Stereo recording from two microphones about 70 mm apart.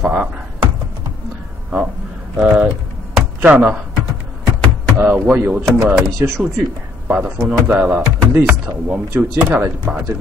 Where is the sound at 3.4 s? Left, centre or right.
Right.